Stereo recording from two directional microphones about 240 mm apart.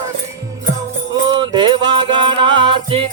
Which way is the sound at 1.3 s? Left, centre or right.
Centre.